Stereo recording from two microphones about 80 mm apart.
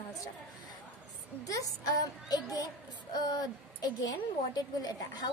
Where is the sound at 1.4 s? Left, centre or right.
Left.